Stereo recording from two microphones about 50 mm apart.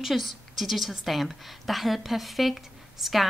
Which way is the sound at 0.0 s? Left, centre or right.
Centre.